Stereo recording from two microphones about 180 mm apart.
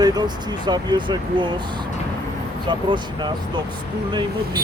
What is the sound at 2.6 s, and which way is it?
Speech, 25° right (ahead or behind).